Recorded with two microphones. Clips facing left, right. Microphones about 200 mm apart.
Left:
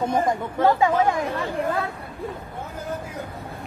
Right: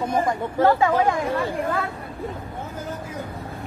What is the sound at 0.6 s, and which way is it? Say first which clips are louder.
Speech: right 1 dB; 15° left (ahead or behind).